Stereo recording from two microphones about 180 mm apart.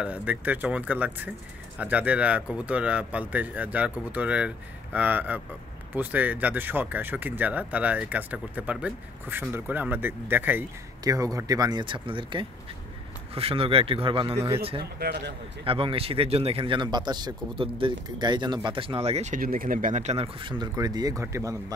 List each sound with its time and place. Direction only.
0.0 s a man's voice: 10° right (ahead or behind); by 14.8 s 30° right (ahead or behind)
14.8 s a man's voice: 60° right (ahead or behind)
15.6 s speech: 30° right (ahead or behind)